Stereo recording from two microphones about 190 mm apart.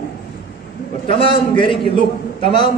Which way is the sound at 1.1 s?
25° left (ahead or behind).